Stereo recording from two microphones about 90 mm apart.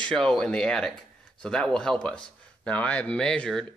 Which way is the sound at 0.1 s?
5° left (ahead or behind).